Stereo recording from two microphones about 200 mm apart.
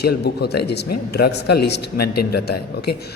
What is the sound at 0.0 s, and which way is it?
Speech, 55° left (ahead or behind).